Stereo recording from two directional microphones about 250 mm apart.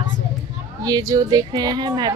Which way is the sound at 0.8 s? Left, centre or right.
Centre.